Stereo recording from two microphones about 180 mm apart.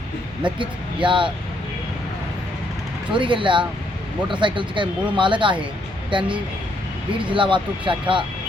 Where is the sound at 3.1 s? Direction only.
25° right (ahead or behind).